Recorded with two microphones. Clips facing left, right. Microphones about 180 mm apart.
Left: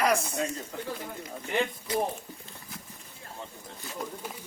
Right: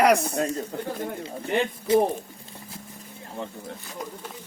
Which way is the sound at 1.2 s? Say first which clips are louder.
Right 3 dB; 30° right (ahead or behind).